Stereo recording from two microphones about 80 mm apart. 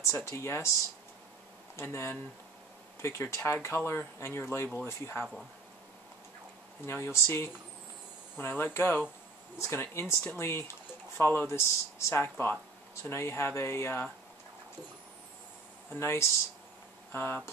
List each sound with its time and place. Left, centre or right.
0.0 s speech: left
1.8 s speech: left
6.9 s speech: left
12.2 s speech: left
15.9 s speech: left